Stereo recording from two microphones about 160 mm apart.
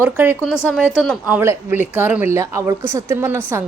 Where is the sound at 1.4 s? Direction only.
15° right (ahead or behind).